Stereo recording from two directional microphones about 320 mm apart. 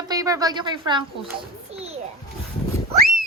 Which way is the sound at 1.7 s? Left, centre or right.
Centre.